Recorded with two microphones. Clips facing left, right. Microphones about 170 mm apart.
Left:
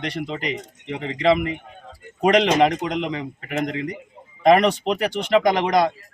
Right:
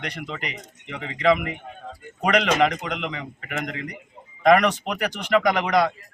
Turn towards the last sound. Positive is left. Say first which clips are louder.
# left 2 dB
turn(degrees=30)  # may be behind; listen again after turning